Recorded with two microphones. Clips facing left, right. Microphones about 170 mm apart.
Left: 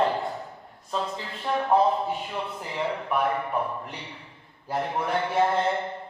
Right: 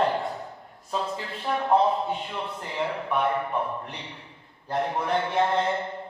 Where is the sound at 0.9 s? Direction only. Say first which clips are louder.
Even; centre (ahead or behind).